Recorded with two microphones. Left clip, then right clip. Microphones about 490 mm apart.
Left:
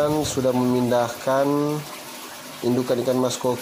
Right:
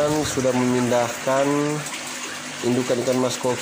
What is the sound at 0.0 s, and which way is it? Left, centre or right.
Speech, centre.